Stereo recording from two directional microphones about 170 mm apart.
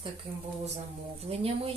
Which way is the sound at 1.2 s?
35° right (ahead or behind).